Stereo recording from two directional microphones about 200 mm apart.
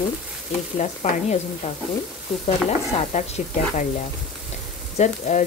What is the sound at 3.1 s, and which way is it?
Speech, 35° left (ahead or behind).